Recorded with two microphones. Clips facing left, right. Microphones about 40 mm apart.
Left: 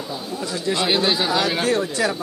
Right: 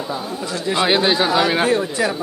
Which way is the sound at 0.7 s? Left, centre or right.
Centre.